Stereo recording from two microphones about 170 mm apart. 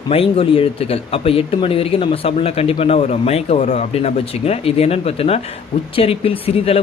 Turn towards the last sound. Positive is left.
turn(degrees=35)  # may be behind; listen again after turning